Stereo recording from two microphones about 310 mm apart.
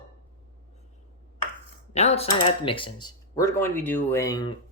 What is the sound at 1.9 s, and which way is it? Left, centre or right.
Speech, left.